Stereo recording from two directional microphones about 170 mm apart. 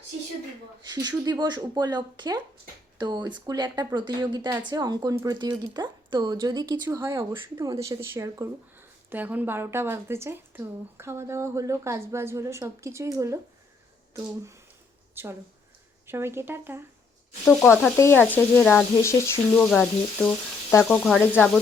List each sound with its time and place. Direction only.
0.8 s a woman's voice: 25° right (ahead or behind)
17.4 s speech: centre (ahead or behind)
17.9 s speech: 15° left (ahead or behind)